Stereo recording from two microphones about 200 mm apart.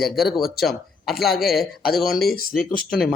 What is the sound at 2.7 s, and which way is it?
Speech, 45° left (ahead or behind).